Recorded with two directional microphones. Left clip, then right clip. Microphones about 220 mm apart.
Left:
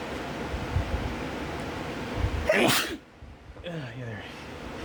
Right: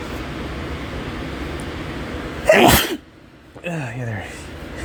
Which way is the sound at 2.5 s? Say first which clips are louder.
Right 11 dB; 20° right (ahead or behind).